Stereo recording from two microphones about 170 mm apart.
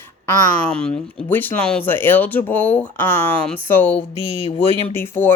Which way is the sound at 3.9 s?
35° left (ahead or behind).